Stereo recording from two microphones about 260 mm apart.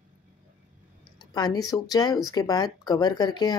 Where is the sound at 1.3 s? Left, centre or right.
Centre.